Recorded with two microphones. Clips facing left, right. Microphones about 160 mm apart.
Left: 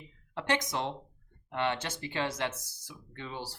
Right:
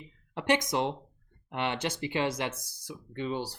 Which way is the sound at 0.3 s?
15° right (ahead or behind).